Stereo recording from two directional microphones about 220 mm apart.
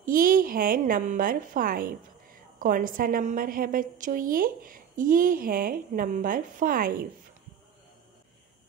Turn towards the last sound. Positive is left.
turn(degrees=-40)  # may be behind; listen again after turning